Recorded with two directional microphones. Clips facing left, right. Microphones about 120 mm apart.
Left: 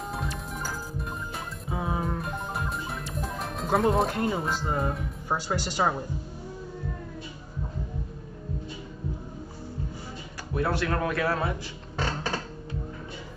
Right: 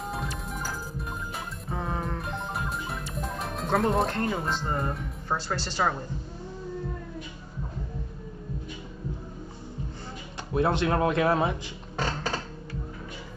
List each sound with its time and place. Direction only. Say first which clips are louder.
0.1 s music: even; centre (ahead or behind)
10.5 s speech: right 3 dB; 20° right (ahead or behind)